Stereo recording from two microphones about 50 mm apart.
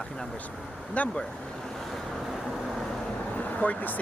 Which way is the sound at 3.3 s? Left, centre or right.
Left.